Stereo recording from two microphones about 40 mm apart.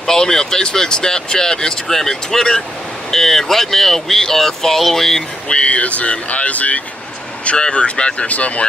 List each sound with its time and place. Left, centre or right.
0.0 s speech: centre
5.5 s speech: left
7.4 s speech: left